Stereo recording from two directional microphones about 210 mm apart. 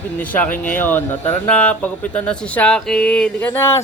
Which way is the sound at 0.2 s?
5° left (ahead or behind).